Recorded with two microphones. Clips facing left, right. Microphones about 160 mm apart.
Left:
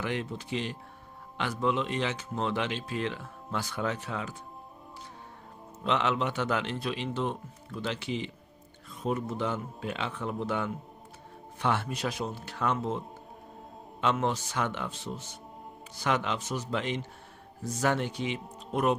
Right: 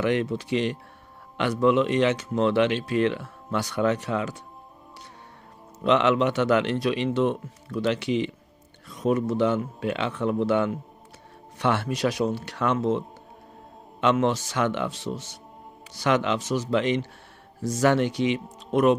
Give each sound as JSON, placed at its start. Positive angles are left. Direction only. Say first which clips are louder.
{"t": 0.0, "sound": "a man's voice", "louder": "right 9 dB", "side_deg": -70}
{"t": 5.9, "sound": "a man's voice", "louder": "right 8 dB", "side_deg": -75}
{"t": 14.0, "sound": "speech", "louder": "right 6 dB", "side_deg": -90}